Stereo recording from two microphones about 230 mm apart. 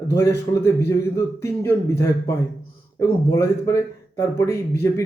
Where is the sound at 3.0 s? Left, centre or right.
Centre.